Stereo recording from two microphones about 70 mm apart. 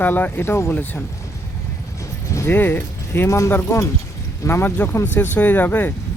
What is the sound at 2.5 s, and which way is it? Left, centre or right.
Speech, left.